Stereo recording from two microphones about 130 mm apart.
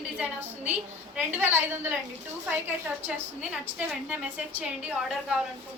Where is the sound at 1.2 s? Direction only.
15° right (ahead or behind).